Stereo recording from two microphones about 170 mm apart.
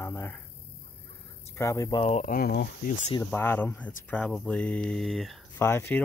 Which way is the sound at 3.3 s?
10° left (ahead or behind).